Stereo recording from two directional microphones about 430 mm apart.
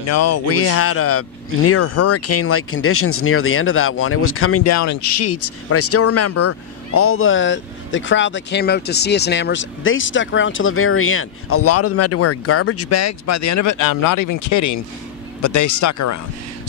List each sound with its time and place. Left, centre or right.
0.0 s speech: left